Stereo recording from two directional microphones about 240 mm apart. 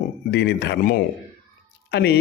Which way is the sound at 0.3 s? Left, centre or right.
Left.